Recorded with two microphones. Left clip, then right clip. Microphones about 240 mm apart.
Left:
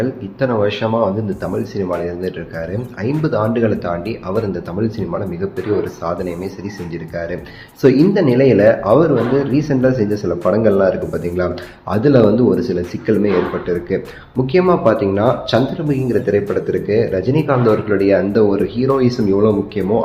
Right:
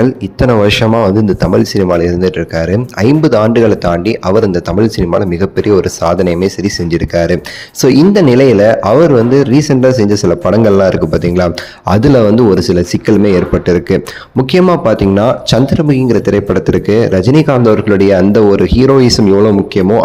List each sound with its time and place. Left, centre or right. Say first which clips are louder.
0.0 s speech: right 8 dB; right